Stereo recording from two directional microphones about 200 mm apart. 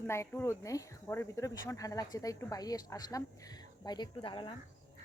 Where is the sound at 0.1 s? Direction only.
15° left (ahead or behind).